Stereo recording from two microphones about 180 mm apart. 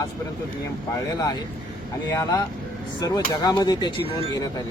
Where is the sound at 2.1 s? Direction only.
20° left (ahead or behind).